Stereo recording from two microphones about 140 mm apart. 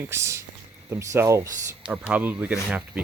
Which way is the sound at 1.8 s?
10° right (ahead or behind).